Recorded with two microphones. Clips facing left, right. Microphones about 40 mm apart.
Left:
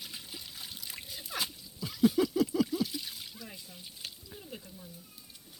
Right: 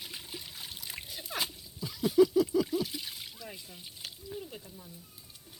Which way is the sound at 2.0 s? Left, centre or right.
Left.